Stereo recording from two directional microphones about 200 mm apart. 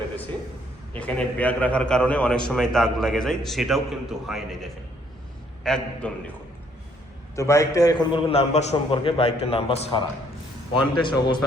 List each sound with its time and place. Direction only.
0.9 s a man's voice: 5° left (ahead or behind)
7.3 s a man's voice: 15° left (ahead or behind)